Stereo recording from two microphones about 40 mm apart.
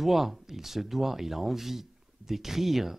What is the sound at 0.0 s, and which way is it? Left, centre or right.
Speech, centre.